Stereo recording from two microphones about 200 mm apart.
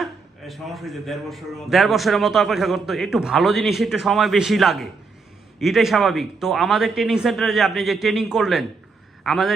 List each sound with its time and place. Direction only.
0.0 s a man's voice: centre (ahead or behind)